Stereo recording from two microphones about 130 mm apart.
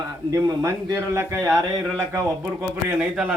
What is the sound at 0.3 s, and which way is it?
A man's voice, 20° right (ahead or behind).